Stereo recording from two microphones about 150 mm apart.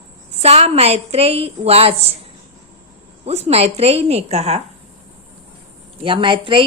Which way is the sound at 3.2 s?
45° right (ahead or behind).